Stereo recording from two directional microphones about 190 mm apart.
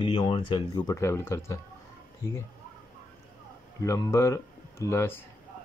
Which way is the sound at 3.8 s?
15° left (ahead or behind).